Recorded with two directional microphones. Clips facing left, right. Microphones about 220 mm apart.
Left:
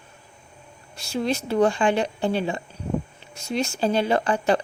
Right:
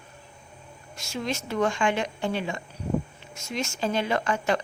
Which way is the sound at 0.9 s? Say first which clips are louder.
Left 6 dB; 35° left (ahead or behind).